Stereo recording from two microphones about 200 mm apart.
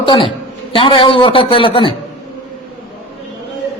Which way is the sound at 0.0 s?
25° left (ahead or behind).